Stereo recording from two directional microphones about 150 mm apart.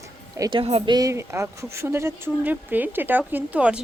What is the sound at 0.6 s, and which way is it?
Speech, 40° right (ahead or behind).